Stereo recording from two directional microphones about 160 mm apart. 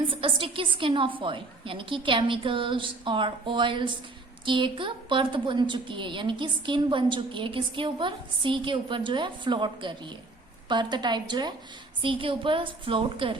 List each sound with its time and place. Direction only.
0.1 s a woman's voice: 35° right (ahead or behind)